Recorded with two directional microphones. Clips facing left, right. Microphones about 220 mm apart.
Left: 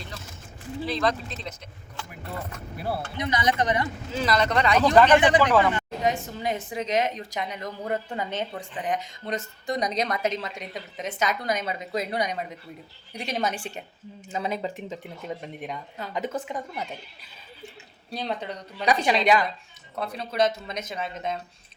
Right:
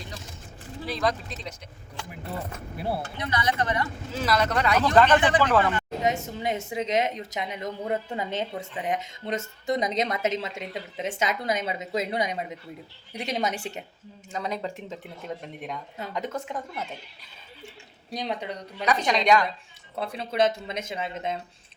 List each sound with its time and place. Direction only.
0.9 s a woman's voice: 10° right (ahead or behind)
3.2 s speech: 15° left (ahead or behind)
4.1 s speech: 5° right (ahead or behind)
4.9 s speech: 15° left (ahead or behind)
6.0 s a woman's voice: 25° right (ahead or behind)
8.8 s a woman's voice: 25° right (ahead or behind)
14.3 s speech: 5° left (ahead or behind)
18.1 s speech: 15° right (ahead or behind)
18.9 s speech: 5° left (ahead or behind)
20.0 s a woman's voice: 25° right (ahead or behind)